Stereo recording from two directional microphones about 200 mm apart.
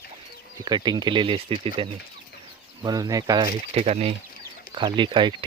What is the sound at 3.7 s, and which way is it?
Speech, 30° right (ahead or behind).